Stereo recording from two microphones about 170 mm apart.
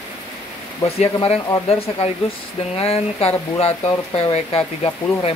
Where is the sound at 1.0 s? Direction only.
35° left (ahead or behind).